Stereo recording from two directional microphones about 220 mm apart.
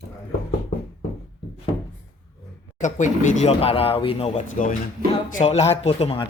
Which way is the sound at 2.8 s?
35° left (ahead or behind).